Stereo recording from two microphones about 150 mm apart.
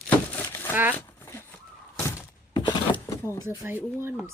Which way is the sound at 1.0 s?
15° left (ahead or behind).